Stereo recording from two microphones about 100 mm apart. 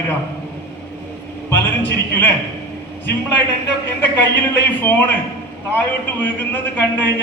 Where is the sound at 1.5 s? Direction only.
20° left (ahead or behind).